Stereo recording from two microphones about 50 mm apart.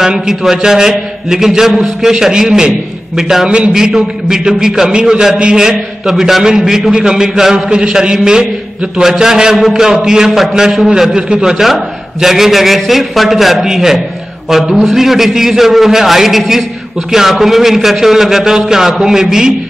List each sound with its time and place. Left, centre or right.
0.0 s a man's voice: centre
3.4 s a man's voice: right
4.5 s a man's voice: centre
7.7 s a man's voice: centre